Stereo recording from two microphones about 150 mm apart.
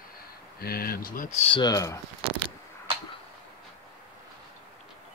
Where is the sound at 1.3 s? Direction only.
40° left (ahead or behind).